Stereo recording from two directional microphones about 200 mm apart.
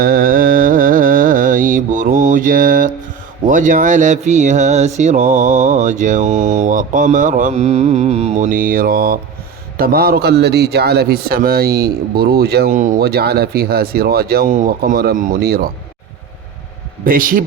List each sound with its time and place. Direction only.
0.0 s music: 45° right (ahead or behind)
3.4 s a man's voice: 40° right (ahead or behind)
17.0 s a man's voice: 45° right (ahead or behind)